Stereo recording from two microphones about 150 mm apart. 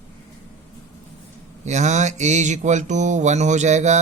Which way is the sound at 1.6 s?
50° right (ahead or behind).